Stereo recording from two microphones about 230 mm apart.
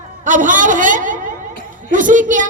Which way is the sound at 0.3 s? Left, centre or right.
Right.